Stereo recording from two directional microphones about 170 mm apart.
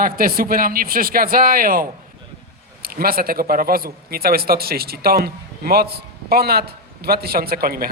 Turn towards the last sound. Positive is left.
turn(degrees=-60)  # may be behind; listen again after turning